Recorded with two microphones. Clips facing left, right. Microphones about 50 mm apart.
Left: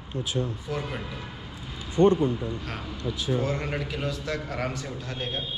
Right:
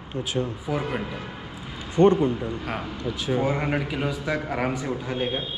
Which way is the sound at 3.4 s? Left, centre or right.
Centre.